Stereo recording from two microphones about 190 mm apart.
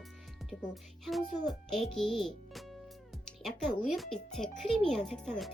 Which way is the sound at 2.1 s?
Centre (ahead or behind).